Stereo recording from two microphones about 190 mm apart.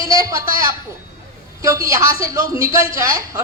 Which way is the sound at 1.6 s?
15° right (ahead or behind).